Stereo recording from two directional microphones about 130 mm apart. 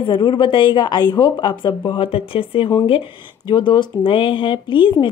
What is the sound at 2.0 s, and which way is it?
Speech, 45° left (ahead or behind).